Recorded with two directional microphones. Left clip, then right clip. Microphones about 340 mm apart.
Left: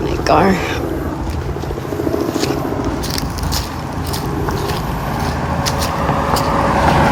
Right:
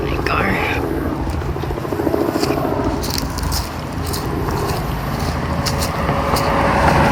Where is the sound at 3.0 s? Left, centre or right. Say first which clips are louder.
Left 1 dB; centre.